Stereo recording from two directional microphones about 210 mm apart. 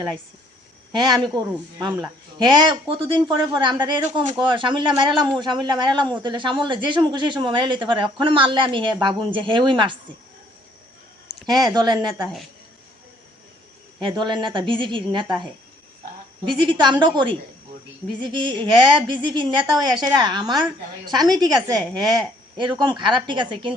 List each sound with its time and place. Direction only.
0.9 s speech: 20° right (ahead or behind)
11.4 s speech: 20° right (ahead or behind)
14.0 s speech: 20° right (ahead or behind)
16.6 s speech: 20° right (ahead or behind)